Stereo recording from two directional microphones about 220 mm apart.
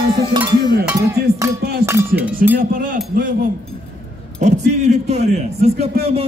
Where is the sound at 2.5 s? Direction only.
40° right (ahead or behind).